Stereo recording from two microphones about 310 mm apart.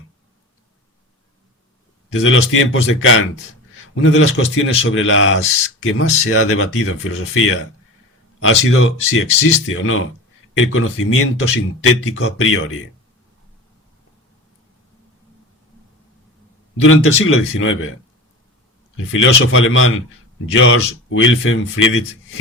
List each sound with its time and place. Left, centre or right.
2.1 s speech: left
16.8 s speech: left
19.1 s speech: left